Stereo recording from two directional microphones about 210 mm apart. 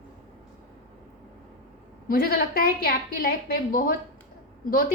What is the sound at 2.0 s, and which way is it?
A woman's voice, 45° left (ahead or behind).